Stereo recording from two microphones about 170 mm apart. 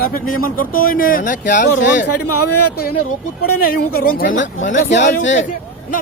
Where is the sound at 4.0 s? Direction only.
60° left (ahead or behind).